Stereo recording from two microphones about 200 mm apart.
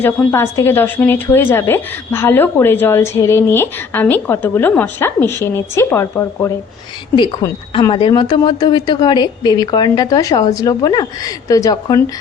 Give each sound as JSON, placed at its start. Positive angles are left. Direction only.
{"t": 0.0, "sound": "a woman's voice", "side_deg": 10}
{"t": 7.2, "sound": "speech", "side_deg": 25}